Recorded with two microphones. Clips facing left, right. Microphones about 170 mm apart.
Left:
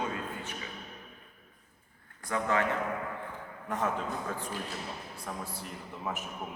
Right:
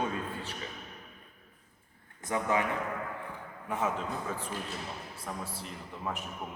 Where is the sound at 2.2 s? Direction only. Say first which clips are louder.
Even; 15° right (ahead or behind).